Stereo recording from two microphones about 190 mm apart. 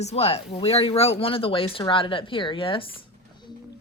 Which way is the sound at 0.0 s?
35° left (ahead or behind).